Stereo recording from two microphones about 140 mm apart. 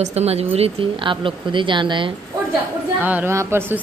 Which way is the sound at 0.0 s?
50° right (ahead or behind).